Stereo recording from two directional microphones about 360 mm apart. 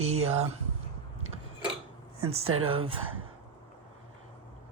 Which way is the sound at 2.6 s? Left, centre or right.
Right.